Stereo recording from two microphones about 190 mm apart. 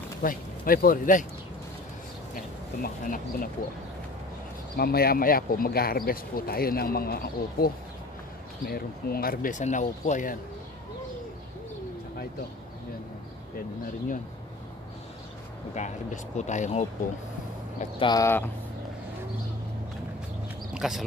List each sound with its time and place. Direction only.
0.2 s speech: 50° left (ahead or behind)
2.3 s speech: 45° left (ahead or behind)
4.7 s speech: 55° left (ahead or behind)
15.7 s speech: 40° left (ahead or behind)
17.9 s speech: 20° left (ahead or behind)
20.7 s a sound: centre (ahead or behind)